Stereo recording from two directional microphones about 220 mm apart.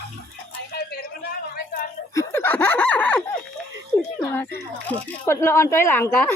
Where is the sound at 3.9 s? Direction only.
10° left (ahead or behind).